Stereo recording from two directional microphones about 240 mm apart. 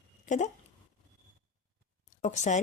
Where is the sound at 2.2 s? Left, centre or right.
Left.